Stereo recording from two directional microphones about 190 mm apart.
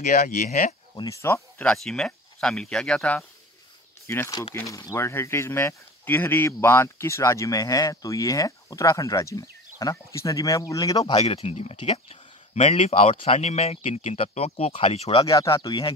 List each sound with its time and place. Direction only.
0.0 s speech: 50° left (ahead or behind)
0.5 s speech: 40° left (ahead or behind)
0.9 s speech: 15° left (ahead or behind)
4.1 s speech: 15° left (ahead or behind)
15.2 s speech: 15° left (ahead or behind)